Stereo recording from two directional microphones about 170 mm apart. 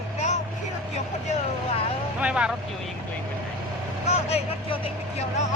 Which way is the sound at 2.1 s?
5° right (ahead or behind).